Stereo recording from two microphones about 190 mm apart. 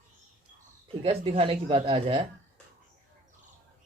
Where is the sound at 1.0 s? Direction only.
30° right (ahead or behind).